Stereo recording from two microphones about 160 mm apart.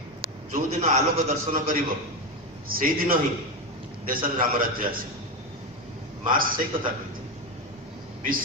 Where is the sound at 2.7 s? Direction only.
60° right (ahead or behind).